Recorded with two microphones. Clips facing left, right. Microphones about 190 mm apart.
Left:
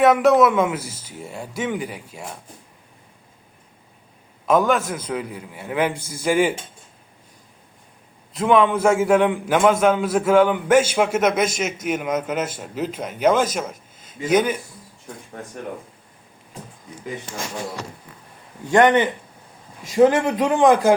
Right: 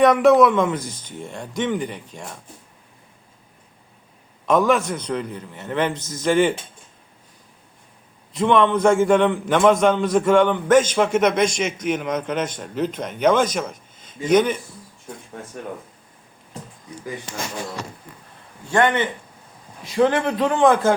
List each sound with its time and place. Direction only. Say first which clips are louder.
0.0 s a man's voice: right 1 dB; centre (ahead or behind)
4.4 s a man's voice: even; centre (ahead or behind)
8.3 s a man's voice: even; centre (ahead or behind)
18.7 s speech: left 4 dB; 20° left (ahead or behind)
20.2 s a man's voice: left 1 dB; 20° left (ahead or behind)